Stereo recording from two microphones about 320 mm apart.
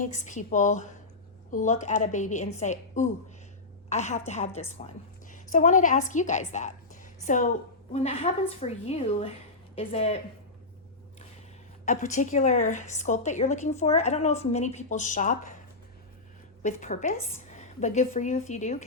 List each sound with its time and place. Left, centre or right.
0.0 s a woman's voice: left
11.9 s a woman's voice: left
16.6 s a woman's voice: left